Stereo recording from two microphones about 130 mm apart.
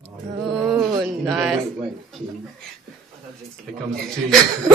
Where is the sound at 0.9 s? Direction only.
25° right (ahead or behind).